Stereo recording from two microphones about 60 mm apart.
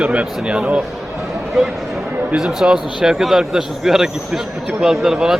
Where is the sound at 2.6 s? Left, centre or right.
Centre.